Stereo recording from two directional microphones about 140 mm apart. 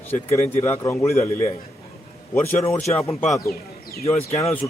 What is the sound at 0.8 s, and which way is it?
Speech, 20° left (ahead or behind).